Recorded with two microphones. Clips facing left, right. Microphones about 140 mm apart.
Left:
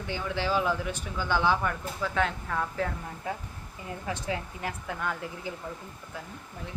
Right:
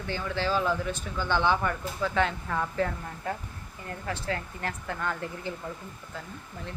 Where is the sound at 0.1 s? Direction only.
15° left (ahead or behind).